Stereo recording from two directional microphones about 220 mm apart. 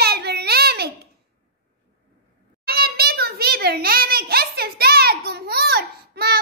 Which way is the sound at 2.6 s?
45° right (ahead or behind).